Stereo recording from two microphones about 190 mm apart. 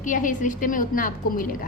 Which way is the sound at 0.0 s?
45° left (ahead or behind).